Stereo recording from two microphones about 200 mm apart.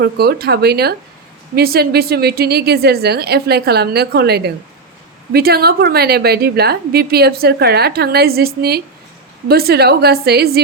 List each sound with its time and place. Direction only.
0.0 s a woman's voice: 50° right (ahead or behind)